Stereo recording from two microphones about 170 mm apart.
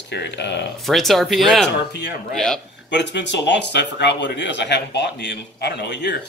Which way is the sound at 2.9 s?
90° left.